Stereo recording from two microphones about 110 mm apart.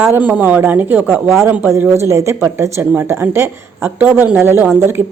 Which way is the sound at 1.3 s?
25° right (ahead or behind).